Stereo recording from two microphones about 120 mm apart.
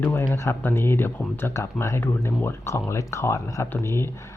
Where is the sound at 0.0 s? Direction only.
15° left (ahead or behind).